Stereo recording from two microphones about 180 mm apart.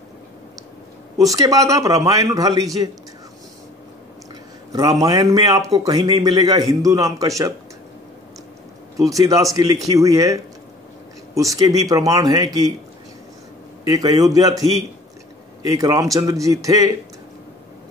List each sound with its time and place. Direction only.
1.1 s a man's voice: 20° right (ahead or behind)
4.7 s a man's voice: 20° right (ahead or behind)
8.9 s a man's voice: 20° right (ahead or behind)
13.8 s a man's voice: 20° right (ahead or behind)